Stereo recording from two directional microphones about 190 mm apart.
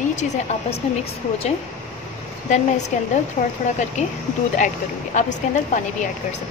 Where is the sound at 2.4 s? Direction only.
40° left (ahead or behind).